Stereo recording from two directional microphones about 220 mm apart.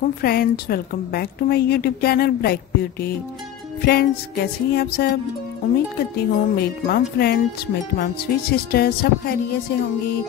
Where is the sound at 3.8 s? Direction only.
45° left (ahead or behind).